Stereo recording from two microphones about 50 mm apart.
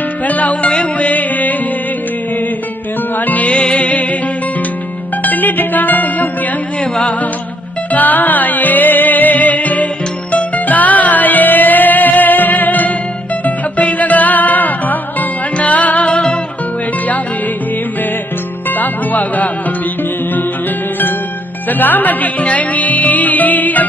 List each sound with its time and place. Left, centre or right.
0.3 s music: left
3.2 s music: left
5.2 s music: left
6.8 s music: left
7.9 s music: left
16.1 s music: centre
18.7 s music: left
21.6 s music: left